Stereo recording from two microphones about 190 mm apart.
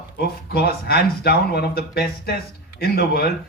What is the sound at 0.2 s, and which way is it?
A man's voice, 55° left (ahead or behind).